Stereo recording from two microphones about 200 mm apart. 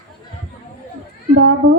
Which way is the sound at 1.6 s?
45° right (ahead or behind).